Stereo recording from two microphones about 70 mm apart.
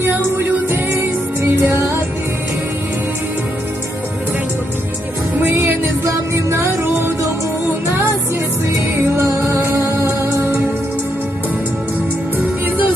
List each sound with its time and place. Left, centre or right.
0.0 s music: right
5.5 s music: right
6.1 s music: right
10.1 s music: right